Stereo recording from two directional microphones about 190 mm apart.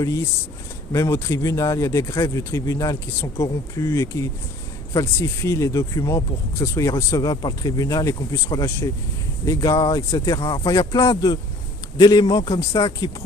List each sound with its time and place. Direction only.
0.9 s speech: 15° left (ahead or behind)